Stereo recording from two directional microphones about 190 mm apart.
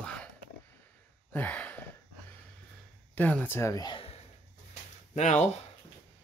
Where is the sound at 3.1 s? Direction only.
10° left (ahead or behind); by 4.2 s 25° left (ahead or behind).